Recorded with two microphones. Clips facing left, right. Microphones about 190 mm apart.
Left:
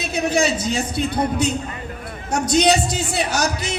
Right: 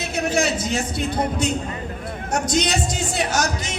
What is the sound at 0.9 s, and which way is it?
A man's voice, 60° left (ahead or behind).